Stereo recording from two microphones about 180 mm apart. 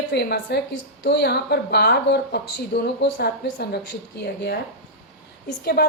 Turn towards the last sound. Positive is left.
turn(degrees=60)  # may be behind; listen again after turning